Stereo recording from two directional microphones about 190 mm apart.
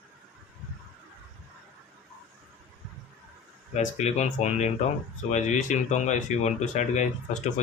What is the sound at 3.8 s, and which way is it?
Speech, 35° left (ahead or behind).